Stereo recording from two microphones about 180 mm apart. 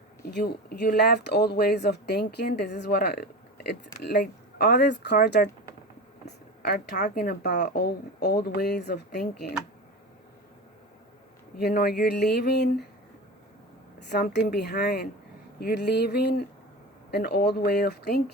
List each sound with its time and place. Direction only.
0.3 s speech: 60° left (ahead or behind)
6.6 s speech: 55° left (ahead or behind)
11.5 s speech: 60° left (ahead or behind)
14.1 s speech: 65° left (ahead or behind)